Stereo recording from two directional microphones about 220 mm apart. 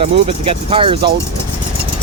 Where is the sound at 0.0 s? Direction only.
25° right (ahead or behind).